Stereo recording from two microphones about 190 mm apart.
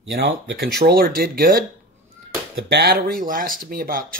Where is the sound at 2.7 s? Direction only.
55° right (ahead or behind).